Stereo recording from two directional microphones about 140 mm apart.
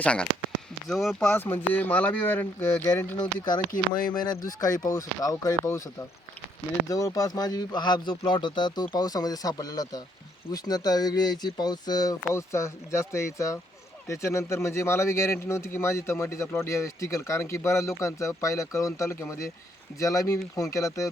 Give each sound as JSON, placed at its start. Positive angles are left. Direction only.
{"t": 0.0, "sound": "speech", "side_deg": 10}
{"t": 3.2, "sound": "speech", "side_deg": 30}